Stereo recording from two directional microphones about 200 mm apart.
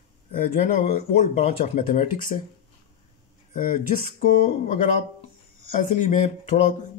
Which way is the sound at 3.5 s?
45° left (ahead or behind).